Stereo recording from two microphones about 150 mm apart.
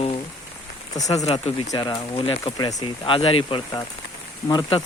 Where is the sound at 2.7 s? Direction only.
30° left (ahead or behind).